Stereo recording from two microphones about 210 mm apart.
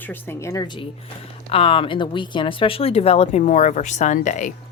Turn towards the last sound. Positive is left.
turn(degrees=35)  # may be behind; listen again after turning